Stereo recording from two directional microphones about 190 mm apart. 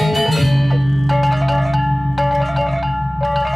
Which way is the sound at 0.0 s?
Centre (ahead or behind).